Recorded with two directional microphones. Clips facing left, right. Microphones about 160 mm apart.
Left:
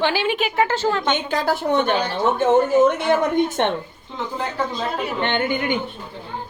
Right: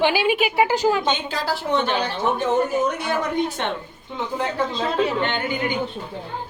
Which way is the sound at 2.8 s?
20° left (ahead or behind).